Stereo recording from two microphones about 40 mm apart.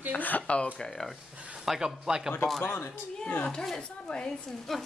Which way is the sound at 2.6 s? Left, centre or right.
Left.